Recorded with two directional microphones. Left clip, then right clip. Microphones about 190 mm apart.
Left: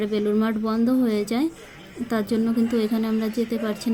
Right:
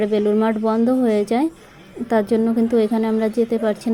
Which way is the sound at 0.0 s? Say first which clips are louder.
Right 6 dB; 15° right (ahead or behind).